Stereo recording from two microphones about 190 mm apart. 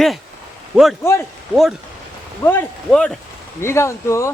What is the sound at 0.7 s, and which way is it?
Speech, centre (ahead or behind).